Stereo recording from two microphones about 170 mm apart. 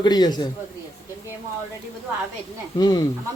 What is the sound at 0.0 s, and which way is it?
Speech, 25° left (ahead or behind).